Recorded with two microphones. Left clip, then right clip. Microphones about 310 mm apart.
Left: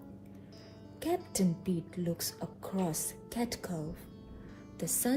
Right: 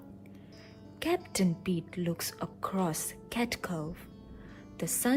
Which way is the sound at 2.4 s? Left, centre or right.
Right.